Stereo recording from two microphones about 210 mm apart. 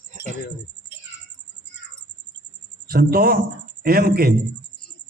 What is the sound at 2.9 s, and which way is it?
A man's voice, 45° right (ahead or behind).